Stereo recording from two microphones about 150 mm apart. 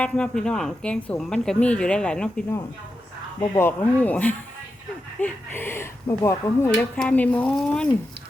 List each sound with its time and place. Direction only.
0.0 s speech: 5° left (ahead or behind)
3.6 s speech: 10° left (ahead or behind)